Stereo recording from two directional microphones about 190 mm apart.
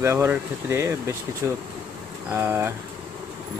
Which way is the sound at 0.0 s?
15° right (ahead or behind).